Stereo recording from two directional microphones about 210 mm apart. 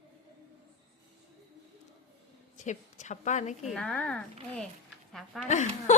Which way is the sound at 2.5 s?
35° left (ahead or behind).